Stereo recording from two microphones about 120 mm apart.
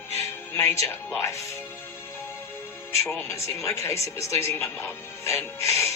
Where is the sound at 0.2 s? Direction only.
20° left (ahead or behind).